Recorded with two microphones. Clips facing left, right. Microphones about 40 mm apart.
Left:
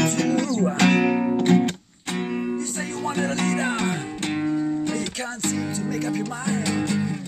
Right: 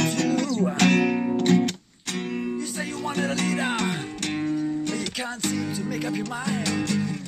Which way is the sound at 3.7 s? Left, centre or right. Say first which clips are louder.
Left 2 dB; left.